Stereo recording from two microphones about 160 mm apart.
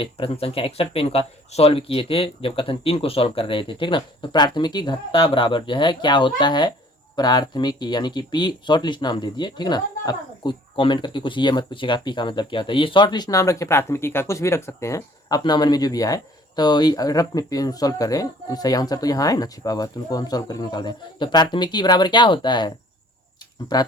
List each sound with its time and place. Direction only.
0.0 s speech: 35° left (ahead or behind)
23.7 s speech: 25° left (ahead or behind)